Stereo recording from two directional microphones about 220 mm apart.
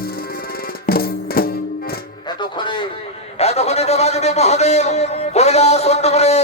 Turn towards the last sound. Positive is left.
turn(degrees=30)  # may be behind; listen again after turning